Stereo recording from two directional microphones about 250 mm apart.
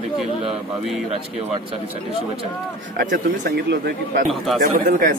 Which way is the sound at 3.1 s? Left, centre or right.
Right.